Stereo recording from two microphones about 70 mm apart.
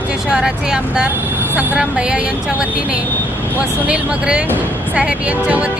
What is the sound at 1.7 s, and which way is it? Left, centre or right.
Speech, centre.